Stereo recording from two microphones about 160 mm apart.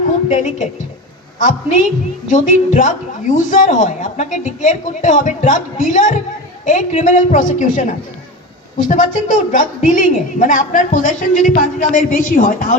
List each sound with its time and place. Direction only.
0.3 s speech: 50° left (ahead or behind)